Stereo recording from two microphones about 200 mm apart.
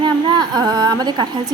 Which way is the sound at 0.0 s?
20° right (ahead or behind).